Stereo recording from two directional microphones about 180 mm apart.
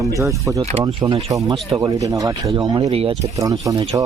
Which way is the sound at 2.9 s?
30° right (ahead or behind).